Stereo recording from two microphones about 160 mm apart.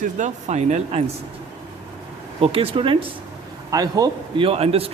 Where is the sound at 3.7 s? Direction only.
20° right (ahead or behind).